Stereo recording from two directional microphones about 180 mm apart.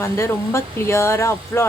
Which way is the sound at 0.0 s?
15° left (ahead or behind).